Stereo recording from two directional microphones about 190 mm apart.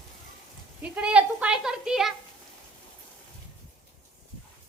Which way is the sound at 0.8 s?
5° right (ahead or behind).